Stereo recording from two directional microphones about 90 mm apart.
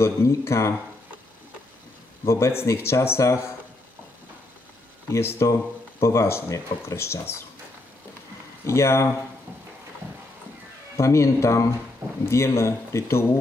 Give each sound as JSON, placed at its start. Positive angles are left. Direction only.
{"t": 0.0, "sound": "speech", "side_deg": 30}
{"t": 2.2, "sound": "speech", "side_deg": 30}
{"t": 5.1, "sound": "speech", "side_deg": 30}
{"t": 8.6, "sound": "speech", "side_deg": 30}
{"t": 11.0, "sound": "speech", "side_deg": 35}